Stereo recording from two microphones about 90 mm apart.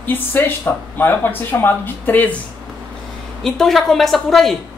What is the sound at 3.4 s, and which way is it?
A woman's voice, 5° left (ahead or behind).